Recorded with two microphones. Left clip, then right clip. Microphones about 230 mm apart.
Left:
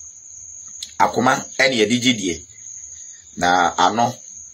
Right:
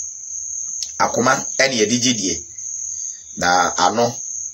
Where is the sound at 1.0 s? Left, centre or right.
Centre.